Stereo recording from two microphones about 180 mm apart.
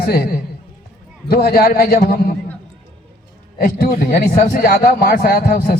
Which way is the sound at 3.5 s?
55° left (ahead or behind).